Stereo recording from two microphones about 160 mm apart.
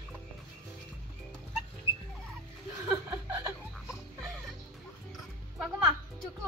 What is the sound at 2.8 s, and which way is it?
Chuckle, 15° right (ahead or behind).